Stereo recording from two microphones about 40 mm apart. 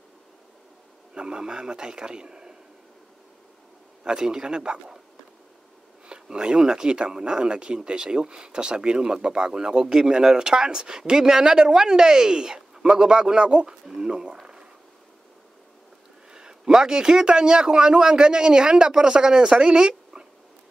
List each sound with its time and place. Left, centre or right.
1.1 s speech: centre
4.0 s speech: centre
6.0 s speech: centre
16.3 s speech: centre
19.9 s a sound: centre